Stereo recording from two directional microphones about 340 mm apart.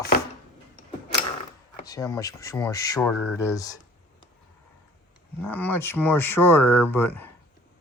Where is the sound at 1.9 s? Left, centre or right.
Centre.